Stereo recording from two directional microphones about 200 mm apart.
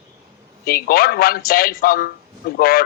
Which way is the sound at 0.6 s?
50° left (ahead or behind).